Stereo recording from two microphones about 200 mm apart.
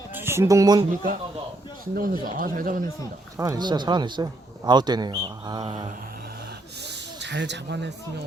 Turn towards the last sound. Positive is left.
turn(degrees=-60)  # may be behind; listen again after turning